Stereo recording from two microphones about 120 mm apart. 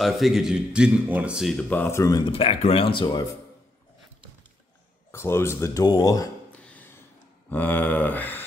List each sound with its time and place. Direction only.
0.0 s speech: centre (ahead or behind)
1.6 s speech: 15° left (ahead or behind)
2.2 s speech: 50° left (ahead or behind)
5.1 s speech: 20° left (ahead or behind)
6.5 s a sound: 10° left (ahead or behind)